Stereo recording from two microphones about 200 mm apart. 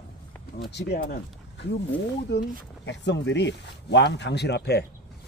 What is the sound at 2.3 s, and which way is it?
Speech, 60° left (ahead or behind).